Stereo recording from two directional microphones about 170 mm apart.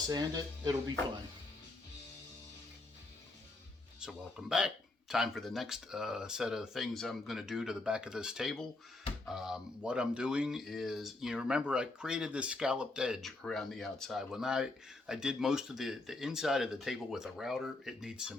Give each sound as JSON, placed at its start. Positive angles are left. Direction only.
{"t": 0.1, "sound": "speech", "side_deg": -25}
{"t": 4.0, "sound": "speech", "side_deg": -5}